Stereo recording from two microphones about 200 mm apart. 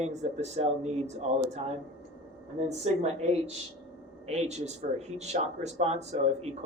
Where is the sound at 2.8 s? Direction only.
30° right (ahead or behind).